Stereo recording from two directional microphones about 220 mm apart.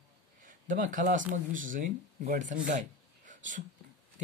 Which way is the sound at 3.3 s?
35° right (ahead or behind).